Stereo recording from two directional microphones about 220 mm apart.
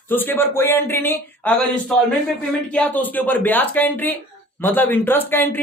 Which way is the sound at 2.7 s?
5° left (ahead or behind).